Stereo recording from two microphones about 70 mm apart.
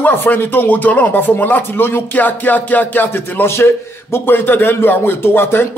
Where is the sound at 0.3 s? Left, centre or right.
Left.